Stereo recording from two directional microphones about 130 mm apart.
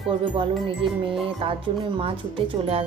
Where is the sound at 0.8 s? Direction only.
40° right (ahead or behind).